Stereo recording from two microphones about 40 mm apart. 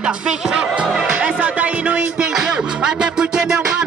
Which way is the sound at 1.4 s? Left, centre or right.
Right.